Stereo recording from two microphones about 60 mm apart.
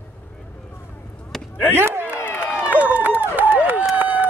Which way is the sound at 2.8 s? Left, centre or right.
Right.